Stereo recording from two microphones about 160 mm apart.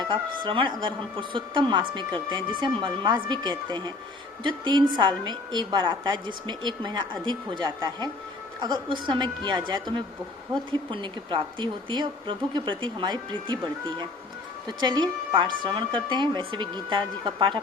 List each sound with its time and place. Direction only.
0.0 s a woman's voice: 30° right (ahead or behind)